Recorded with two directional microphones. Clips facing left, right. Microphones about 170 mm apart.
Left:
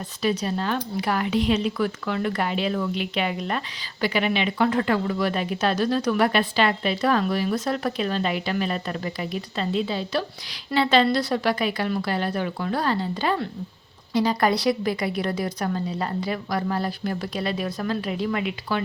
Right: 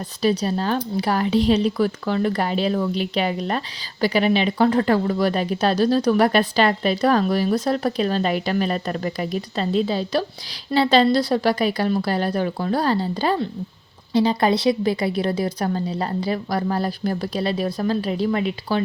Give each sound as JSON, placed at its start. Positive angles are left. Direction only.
{"t": 0.2, "sound": "speech", "side_deg": -35}